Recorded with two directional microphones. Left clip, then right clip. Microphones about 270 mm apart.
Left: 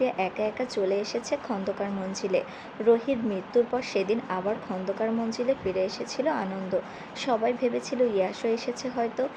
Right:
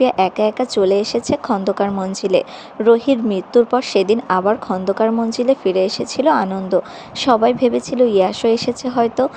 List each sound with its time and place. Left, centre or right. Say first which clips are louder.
0.0 s speech: right 12 dB; right